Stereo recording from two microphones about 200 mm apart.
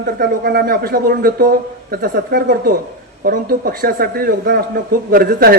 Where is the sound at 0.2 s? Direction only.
50° right (ahead or behind).